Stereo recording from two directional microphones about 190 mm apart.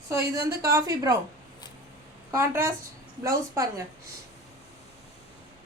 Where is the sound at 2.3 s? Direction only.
15° right (ahead or behind).